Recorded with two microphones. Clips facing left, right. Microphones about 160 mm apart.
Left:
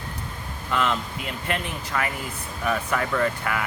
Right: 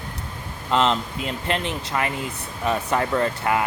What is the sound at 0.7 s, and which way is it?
Speech, 25° right (ahead or behind).